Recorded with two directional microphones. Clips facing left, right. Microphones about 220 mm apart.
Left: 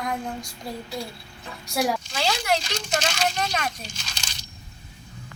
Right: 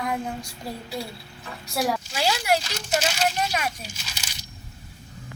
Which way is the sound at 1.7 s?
5° right (ahead or behind).